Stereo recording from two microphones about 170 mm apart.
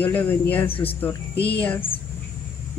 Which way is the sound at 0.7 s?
35° left (ahead or behind).